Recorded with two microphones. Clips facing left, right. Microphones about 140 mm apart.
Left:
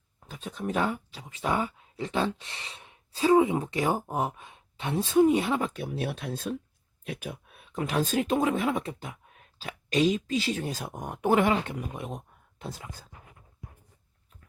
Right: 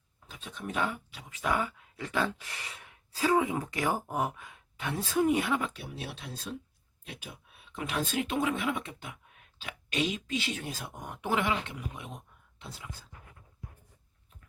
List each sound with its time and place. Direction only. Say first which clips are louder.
0.3 s speech: left 7 dB; 40° left (ahead or behind)